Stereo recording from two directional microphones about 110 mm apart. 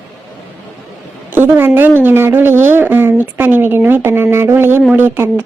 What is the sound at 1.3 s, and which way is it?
A woman's voice, 20° right (ahead or behind).